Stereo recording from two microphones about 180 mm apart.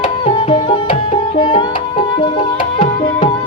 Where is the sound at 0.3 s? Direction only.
30° left (ahead or behind).